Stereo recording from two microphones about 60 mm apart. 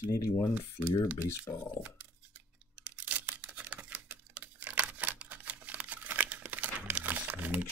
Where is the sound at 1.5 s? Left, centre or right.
Left.